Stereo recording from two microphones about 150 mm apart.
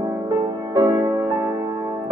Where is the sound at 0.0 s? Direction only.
25° right (ahead or behind).